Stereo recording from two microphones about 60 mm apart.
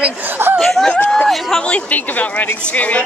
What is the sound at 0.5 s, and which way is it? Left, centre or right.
Speech, centre.